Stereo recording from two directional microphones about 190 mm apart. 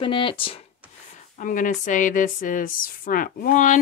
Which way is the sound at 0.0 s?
25° left (ahead or behind).